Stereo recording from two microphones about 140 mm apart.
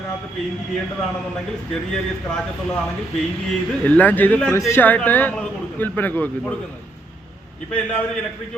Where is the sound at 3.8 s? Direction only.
10° left (ahead or behind).